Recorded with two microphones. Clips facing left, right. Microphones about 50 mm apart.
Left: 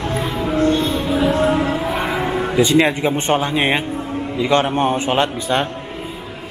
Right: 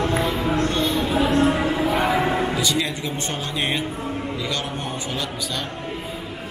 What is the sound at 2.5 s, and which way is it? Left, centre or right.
Music, left.